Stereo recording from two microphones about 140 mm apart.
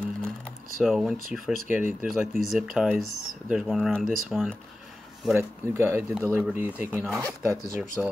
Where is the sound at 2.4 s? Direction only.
Centre (ahead or behind).